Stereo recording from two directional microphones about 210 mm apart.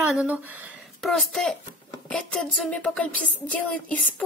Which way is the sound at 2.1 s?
Centre (ahead or behind).